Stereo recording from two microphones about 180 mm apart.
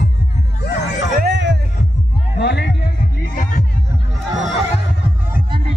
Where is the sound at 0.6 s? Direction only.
65° left (ahead or behind).